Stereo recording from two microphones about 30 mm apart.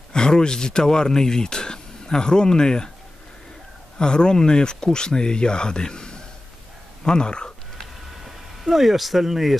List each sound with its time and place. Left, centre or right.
0.1 s speech: left
4.0 s speech: left
8.3 s speech: centre